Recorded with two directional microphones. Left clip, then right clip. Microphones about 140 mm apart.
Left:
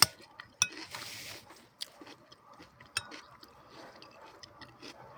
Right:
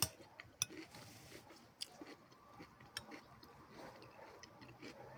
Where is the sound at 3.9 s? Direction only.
15° right (ahead or behind).